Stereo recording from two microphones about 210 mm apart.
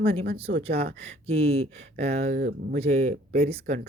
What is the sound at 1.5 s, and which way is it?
Speech, 30° right (ahead or behind).